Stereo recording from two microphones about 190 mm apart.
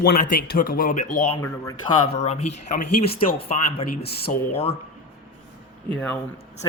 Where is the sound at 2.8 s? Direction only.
55° left (ahead or behind).